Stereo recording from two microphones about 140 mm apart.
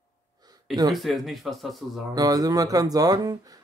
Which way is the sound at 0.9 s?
Centre (ahead or behind).